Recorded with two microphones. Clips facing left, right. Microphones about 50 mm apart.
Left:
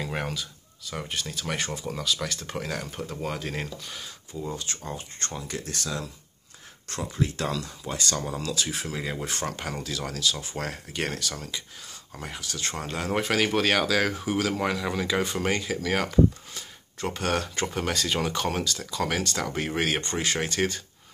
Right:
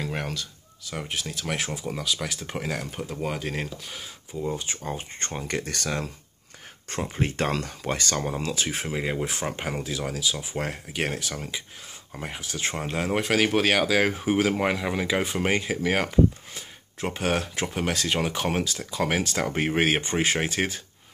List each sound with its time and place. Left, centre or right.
0.0 s a sound: centre
0.9 s speech: centre; by 5.4 s right
5.4 s speech: right
7.2 s speech: right
8.1 s speech: right
8.9 s speech: right
19.4 s speech: right; by 20.8 s centre